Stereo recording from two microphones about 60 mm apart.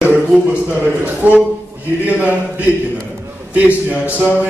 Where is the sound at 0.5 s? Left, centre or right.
Right.